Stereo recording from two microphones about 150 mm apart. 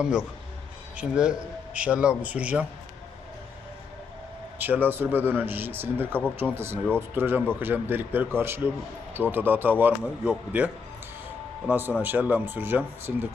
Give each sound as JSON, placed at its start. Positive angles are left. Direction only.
{"t": 0.0, "sound": "a man's voice", "side_deg": -5}
{"t": 4.5, "sound": "a man's voice", "side_deg": -10}
{"t": 11.7, "sound": "a man's voice", "side_deg": -15}